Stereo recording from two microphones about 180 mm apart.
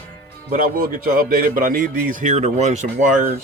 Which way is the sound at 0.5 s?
50° right (ahead or behind).